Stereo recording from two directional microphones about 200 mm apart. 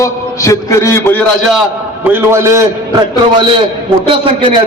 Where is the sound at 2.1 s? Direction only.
10° right (ahead or behind).